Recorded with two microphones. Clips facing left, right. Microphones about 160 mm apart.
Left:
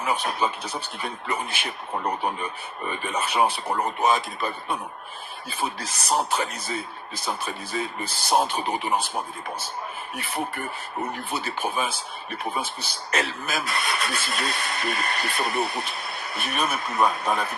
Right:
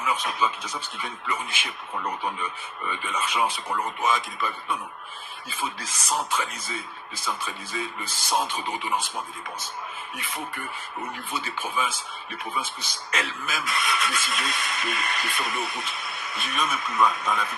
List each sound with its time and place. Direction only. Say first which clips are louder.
0.0 s speech: left 1 dB; 35° left (ahead or behind)